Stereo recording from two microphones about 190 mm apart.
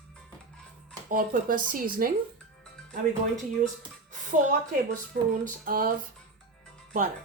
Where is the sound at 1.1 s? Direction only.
45° right (ahead or behind).